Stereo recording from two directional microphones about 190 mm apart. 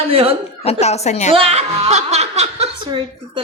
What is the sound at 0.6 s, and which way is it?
Speech, 35° left (ahead or behind).